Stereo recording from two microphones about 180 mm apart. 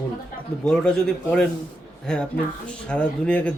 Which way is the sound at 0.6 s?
5° left (ahead or behind).